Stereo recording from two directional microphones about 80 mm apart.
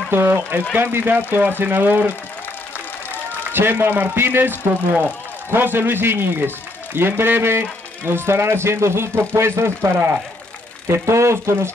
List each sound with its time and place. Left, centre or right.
0.1 s a man's voice: right
3.5 s a man's voice: right